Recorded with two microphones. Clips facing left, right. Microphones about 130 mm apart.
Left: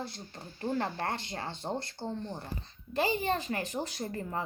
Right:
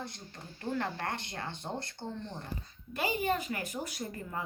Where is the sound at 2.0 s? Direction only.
20° left (ahead or behind).